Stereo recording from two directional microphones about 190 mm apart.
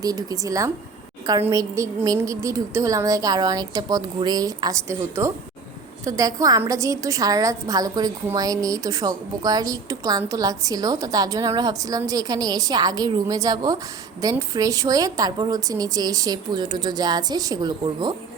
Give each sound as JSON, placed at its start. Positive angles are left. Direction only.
{"t": 0.0, "sound": "a woman's voice", "side_deg": -20}